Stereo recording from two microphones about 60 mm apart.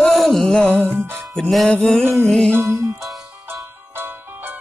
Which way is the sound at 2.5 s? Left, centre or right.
Right.